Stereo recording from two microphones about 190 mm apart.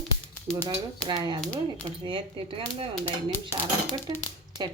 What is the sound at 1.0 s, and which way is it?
Speech, 25° right (ahead or behind).